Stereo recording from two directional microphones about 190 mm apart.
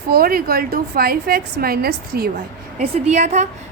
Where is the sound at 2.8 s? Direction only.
35° right (ahead or behind).